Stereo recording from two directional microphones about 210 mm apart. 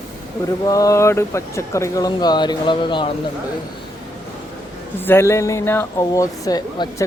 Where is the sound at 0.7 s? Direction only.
15° left (ahead or behind).